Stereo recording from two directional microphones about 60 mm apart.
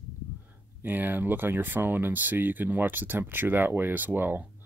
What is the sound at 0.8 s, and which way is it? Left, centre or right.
Speech, right.